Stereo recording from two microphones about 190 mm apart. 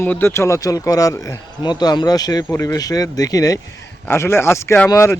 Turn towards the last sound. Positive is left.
turn(degrees=15)  # may be behind; listen again after turning